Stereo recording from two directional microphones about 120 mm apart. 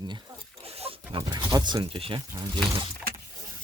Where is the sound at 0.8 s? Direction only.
50° right (ahead or behind).